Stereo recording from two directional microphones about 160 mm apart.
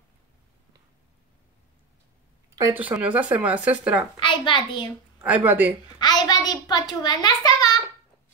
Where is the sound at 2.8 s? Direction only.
10° right (ahead or behind).